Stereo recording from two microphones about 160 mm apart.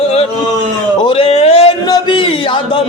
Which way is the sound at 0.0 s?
40° left (ahead or behind).